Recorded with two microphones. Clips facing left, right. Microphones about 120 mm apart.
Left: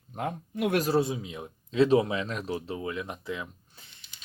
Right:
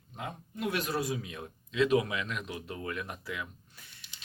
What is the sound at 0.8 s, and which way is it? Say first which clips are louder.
Speech: left 7 dB; 30° left (ahead or behind).